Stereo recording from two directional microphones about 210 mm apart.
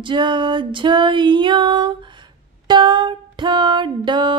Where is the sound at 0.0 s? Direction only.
20° right (ahead or behind).